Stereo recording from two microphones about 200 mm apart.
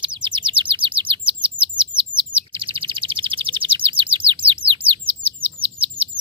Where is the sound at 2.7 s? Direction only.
25° right (ahead or behind).